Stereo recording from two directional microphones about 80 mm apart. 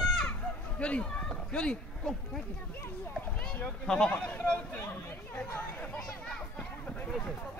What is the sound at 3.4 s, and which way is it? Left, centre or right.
Speech, centre.